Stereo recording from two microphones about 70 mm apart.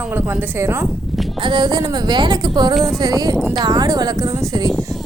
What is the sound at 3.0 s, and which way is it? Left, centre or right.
Speech, right.